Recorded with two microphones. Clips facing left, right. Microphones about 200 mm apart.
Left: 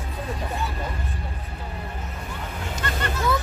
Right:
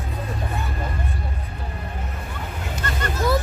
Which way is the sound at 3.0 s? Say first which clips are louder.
Right 3 dB; 40° right (ahead or behind).